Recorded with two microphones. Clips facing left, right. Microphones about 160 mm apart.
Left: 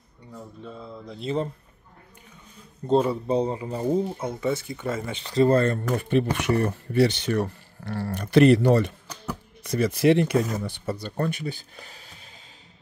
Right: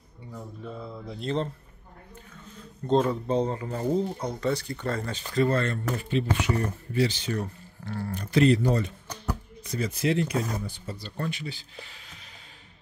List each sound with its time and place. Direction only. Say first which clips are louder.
0.3 s speech: right 1 dB; centre (ahead or behind)
2.9 s speech: left 2 dB; 10° left (ahead or behind)
5.1 s speech: left 6 dB; 30° left (ahead or behind)
5.9 s speech: left 4 dB; 55° left (ahead or behind); by 12.2 s 40° left (ahead or behind)